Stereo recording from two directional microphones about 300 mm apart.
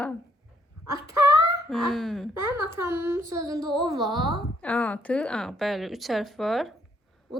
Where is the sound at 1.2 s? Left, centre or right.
Centre.